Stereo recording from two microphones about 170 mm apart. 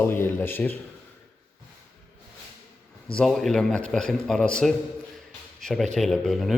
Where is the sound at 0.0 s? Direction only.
15° left (ahead or behind).